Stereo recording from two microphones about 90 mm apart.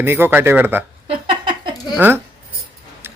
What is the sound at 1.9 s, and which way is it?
Speech, 20° right (ahead or behind).